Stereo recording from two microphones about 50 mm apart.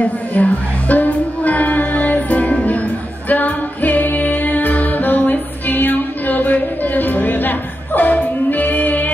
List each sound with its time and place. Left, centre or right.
0.0 s music: left